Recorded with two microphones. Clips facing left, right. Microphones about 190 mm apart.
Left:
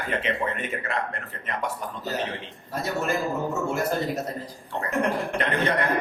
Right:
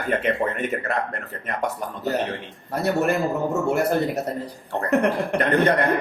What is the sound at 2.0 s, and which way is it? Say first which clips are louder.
A man's voice: right 6 dB; 60° right (ahead or behind).